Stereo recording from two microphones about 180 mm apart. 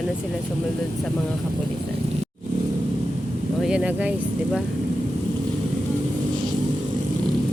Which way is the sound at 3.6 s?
5° right (ahead or behind).